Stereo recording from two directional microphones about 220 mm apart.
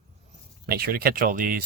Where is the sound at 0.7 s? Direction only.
45° right (ahead or behind).